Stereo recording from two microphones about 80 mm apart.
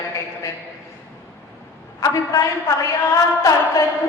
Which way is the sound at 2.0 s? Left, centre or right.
Left.